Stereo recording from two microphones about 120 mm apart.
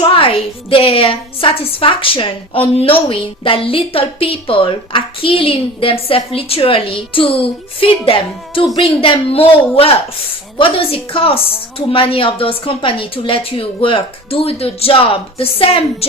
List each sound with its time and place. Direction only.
0.1 s a woman's voice: 50° left (ahead or behind)
10.6 s a woman's voice: 50° left (ahead or behind)